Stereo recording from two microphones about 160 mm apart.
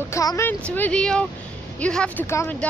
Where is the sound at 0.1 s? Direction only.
20° left (ahead or behind).